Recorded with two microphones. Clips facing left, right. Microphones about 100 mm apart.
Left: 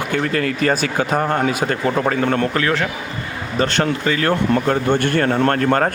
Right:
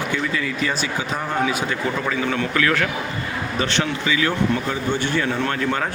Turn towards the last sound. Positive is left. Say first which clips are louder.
# left 6 dB
turn(degrees=50)  # may be behind; listen again after turning